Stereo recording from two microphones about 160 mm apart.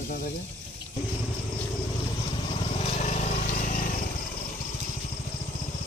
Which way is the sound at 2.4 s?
40° left (ahead or behind).